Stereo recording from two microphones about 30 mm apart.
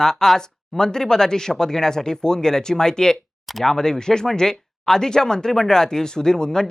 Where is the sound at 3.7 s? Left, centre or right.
Centre.